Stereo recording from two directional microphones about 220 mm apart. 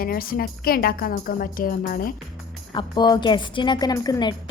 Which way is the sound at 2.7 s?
20° left (ahead or behind).